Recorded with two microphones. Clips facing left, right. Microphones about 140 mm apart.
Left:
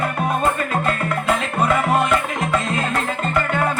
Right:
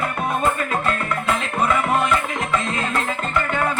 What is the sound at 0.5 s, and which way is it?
Music, 50° left (ahead or behind).